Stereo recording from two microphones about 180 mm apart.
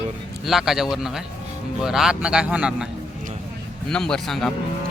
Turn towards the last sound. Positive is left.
turn(degrees=0)  # may be behind; listen again after turning